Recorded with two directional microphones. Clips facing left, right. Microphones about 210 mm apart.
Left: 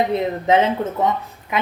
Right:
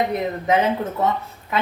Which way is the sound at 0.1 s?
25° left (ahead or behind).